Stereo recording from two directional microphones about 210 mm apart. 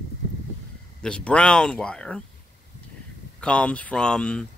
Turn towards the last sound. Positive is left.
turn(degrees=5)  # may be behind; listen again after turning